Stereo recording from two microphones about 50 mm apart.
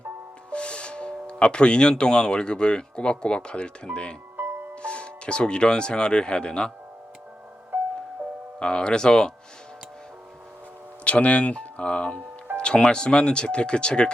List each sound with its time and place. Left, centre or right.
0.5 s speech: left
8.5 s speech: centre
11.0 s speech: left